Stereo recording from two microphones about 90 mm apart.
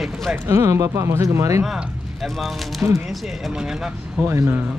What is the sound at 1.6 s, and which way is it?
Speech, centre (ahead or behind).